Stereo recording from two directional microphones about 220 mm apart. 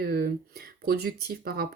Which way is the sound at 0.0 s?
45° right (ahead or behind).